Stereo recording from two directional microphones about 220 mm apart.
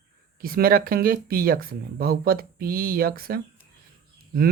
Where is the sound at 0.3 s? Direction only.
40° right (ahead or behind).